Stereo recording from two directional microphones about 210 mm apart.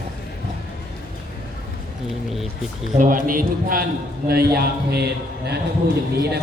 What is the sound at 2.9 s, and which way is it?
A man's voice, 40° right (ahead or behind).